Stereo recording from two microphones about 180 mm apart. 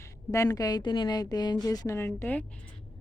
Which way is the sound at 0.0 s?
15° left (ahead or behind).